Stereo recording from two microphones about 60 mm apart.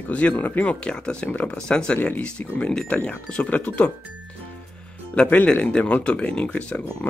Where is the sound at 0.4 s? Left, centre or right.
Left.